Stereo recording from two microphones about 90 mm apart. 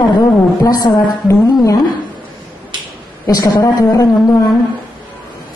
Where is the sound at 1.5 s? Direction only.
35° left (ahead or behind).